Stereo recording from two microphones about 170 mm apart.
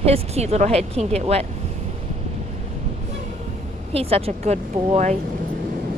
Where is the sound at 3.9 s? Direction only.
35° right (ahead or behind).